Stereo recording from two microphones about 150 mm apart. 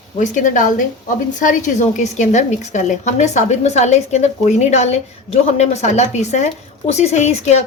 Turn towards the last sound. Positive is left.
turn(degrees=50)  # may be behind; listen again after turning